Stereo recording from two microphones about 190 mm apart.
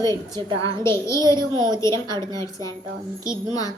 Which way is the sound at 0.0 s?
15° left (ahead or behind).